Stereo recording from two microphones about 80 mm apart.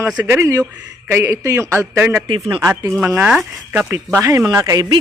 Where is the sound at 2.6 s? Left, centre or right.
Right.